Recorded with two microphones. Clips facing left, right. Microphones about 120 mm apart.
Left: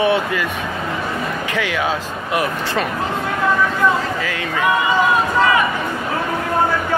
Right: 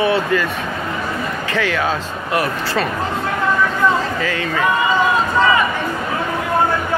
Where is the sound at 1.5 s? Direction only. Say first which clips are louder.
Right 2 dB; 15° left (ahead or behind).